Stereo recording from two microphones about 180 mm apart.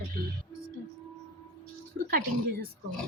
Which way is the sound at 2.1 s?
55° right (ahead or behind).